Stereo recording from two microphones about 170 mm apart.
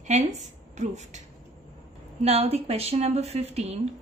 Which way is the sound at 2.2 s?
35° right (ahead or behind).